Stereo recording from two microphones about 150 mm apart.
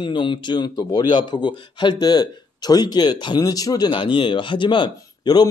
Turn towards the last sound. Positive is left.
turn(degrees=30)  # may be behind; listen again after turning